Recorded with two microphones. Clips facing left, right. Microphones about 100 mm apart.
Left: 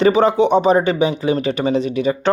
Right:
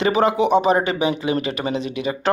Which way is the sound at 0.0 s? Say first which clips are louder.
Left 4 dB; 35° left (ahead or behind).